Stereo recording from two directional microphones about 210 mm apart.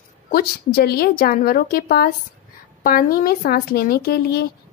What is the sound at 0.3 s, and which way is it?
Speech, 45° left (ahead or behind).